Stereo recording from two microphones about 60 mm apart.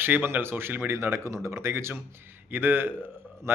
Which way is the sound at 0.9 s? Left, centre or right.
Right.